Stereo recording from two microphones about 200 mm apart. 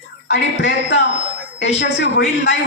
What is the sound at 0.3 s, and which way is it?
A man's voice, 60° left (ahead or behind).